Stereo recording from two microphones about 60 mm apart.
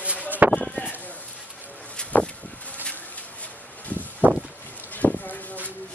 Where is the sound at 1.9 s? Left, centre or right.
Centre.